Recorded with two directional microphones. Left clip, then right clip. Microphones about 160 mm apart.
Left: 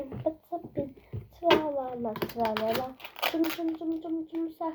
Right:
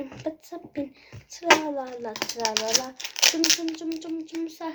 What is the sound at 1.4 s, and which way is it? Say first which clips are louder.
A child's voice: right 4 dB; 50° right (ahead or behind).